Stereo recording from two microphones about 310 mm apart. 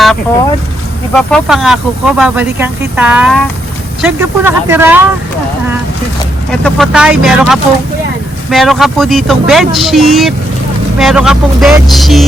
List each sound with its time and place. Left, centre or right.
1.1 s speech: centre
6.5 s speech: centre